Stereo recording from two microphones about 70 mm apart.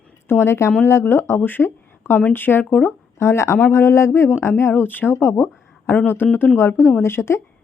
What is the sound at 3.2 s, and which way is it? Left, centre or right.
Speech, left.